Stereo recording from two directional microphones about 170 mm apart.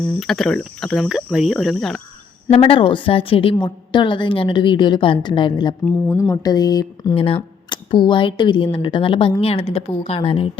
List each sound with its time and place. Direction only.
0.0 s speech: centre (ahead or behind)
2.5 s a woman's voice: 30° left (ahead or behind)
5.8 s a woman's voice: 15° left (ahead or behind); by 10.5 s 30° left (ahead or behind)